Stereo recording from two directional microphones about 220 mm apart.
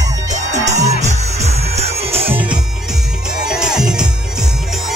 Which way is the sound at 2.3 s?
5° right (ahead or behind).